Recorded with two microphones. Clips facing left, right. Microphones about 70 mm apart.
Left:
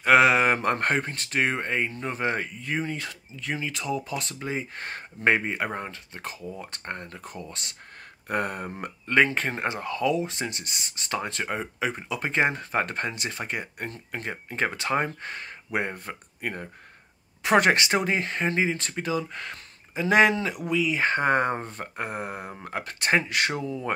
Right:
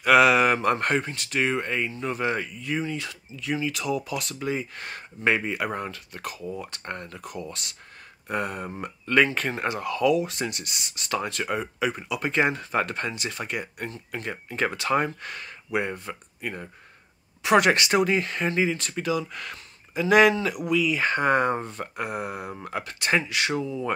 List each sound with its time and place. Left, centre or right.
0.0 s speech: left
8.3 s speech: left
9.0 s speech: left